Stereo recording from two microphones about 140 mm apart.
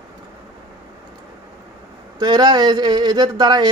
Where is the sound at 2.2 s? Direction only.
30° right (ahead or behind).